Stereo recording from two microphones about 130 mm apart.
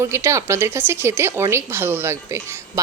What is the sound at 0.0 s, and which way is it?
Speech, 20° right (ahead or behind).